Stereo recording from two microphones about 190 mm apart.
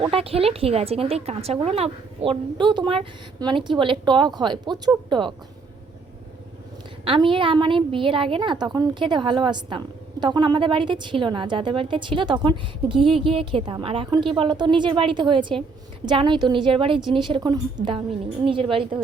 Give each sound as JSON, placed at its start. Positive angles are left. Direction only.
{"t": 0.0, "sound": "a woman's voice", "side_deg": -30}
{"t": 7.0, "sound": "a woman's voice", "side_deg": -25}
{"t": 17.8, "sound": "a woman's voice", "side_deg": -45}
{"t": 18.4, "sound": "a woman's voice", "side_deg": -30}